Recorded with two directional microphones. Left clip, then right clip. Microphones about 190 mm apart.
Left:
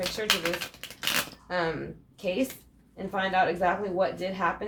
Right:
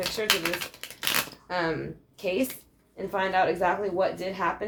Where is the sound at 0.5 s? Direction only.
10° right (ahead or behind).